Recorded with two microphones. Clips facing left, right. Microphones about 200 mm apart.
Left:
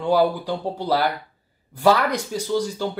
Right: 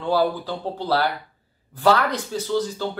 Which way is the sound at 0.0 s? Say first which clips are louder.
Left 2 dB; 15° left (ahead or behind).